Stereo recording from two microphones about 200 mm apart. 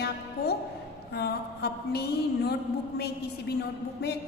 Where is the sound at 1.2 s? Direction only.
55° left (ahead or behind).